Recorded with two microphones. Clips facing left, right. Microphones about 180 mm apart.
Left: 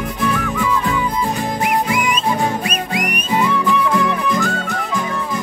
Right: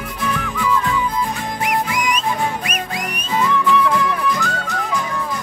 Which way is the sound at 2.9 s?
15° left (ahead or behind).